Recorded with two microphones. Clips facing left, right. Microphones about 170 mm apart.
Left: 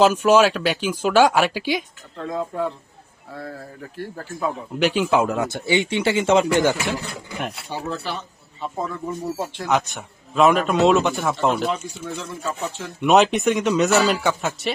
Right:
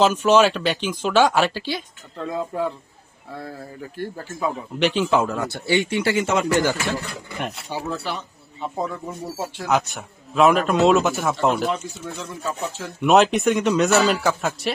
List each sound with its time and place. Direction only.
0.0 s speech: 10° left (ahead or behind)
2.3 s speech: 5° right (ahead or behind)
3.9 s speech: centre (ahead or behind)
4.9 s speech: 10° left (ahead or behind)
7.3 s speech: centre (ahead or behind)
7.7 s speech: 10° right (ahead or behind)
9.6 s speech: centre (ahead or behind)